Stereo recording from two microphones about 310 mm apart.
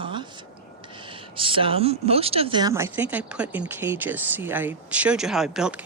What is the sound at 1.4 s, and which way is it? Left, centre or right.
Speech, centre.